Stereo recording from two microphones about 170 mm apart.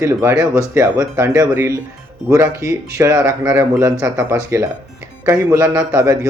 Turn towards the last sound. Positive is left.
turn(degrees=-20)  # may be behind; listen again after turning